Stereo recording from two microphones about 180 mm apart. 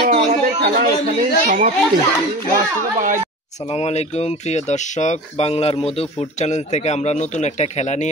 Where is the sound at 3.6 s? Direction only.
35° left (ahead or behind).